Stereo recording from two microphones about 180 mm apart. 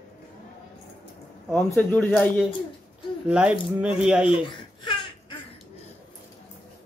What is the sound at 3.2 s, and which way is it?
Speech, 5° right (ahead or behind).